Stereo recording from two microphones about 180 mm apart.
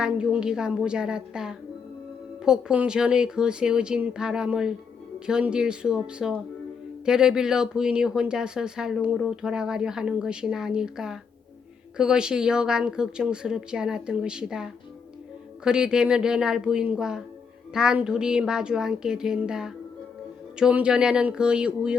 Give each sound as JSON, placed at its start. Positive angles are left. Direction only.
{"t": 0.0, "sound": "speech", "side_deg": -5}